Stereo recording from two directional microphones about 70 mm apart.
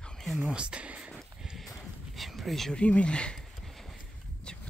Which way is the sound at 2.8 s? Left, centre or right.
Centre.